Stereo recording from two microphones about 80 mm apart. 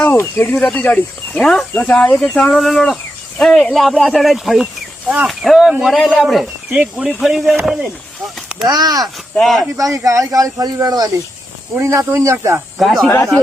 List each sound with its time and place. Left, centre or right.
0.1 s speech: left
0.5 s speech: centre
2.6 s speech: centre
4.6 s a sound: right
5.2 s speech: centre
8.6 s speech: right
9.3 s speech: centre
9.7 s speech: right
11.8 s speech: right
12.8 s speech: centre